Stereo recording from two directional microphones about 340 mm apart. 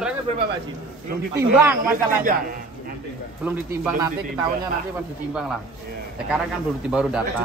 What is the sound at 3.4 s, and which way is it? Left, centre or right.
Speech, centre.